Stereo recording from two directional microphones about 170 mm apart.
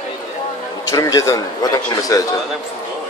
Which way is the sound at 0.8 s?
20° left (ahead or behind).